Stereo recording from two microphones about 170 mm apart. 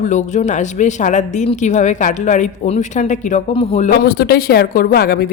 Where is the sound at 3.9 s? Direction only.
70° left (ahead or behind).